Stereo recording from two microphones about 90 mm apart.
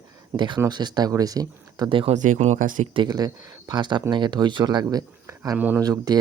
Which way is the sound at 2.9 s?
55° right (ahead or behind).